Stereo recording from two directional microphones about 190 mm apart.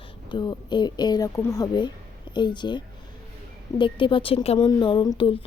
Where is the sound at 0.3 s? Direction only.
25° left (ahead or behind).